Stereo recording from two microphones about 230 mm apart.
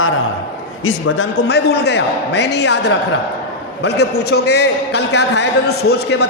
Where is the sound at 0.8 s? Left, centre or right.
Left.